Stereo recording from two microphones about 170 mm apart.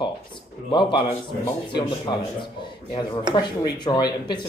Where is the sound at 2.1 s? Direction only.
30° left (ahead or behind).